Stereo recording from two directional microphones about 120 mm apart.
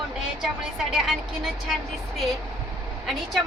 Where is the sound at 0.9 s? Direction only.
5° right (ahead or behind).